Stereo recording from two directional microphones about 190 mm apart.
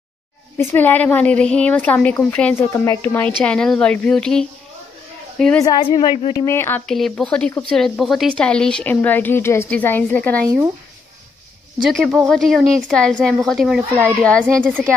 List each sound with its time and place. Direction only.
0.6 s a woman's voice: 10° left (ahead or behind)
5.6 s a woman's voice: 25° left (ahead or behind)
6.4 s a woman's voice: 15° left (ahead or behind)
6.9 s speech: centre (ahead or behind)
11.9 s speech: centre (ahead or behind)